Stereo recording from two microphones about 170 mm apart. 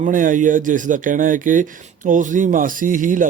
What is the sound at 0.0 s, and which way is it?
Speech, 50° right (ahead or behind).